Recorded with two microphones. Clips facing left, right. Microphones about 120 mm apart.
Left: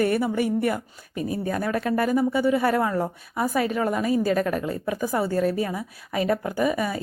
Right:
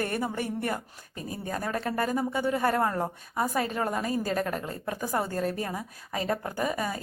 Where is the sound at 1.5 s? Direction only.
25° right (ahead or behind).